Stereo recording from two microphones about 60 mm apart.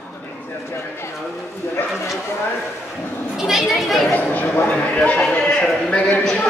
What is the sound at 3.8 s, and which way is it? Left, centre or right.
Chatter, centre.